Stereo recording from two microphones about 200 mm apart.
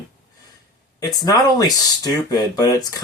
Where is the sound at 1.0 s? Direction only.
20° left (ahead or behind).